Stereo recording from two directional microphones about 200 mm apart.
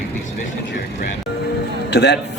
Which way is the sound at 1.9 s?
55° left (ahead or behind).